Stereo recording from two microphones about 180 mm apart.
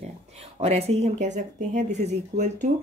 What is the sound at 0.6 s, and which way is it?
Speech, 35° right (ahead or behind).